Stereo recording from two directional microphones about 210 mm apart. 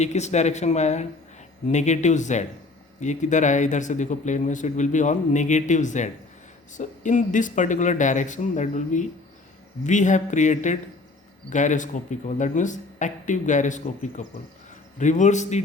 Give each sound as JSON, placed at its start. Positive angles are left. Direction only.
{"t": 0.0, "sound": "speech", "side_deg": 35}